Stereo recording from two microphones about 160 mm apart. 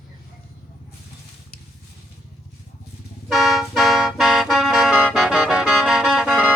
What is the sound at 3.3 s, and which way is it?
Music, centre (ahead or behind).